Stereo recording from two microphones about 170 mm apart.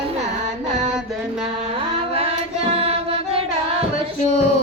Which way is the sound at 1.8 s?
35° right (ahead or behind).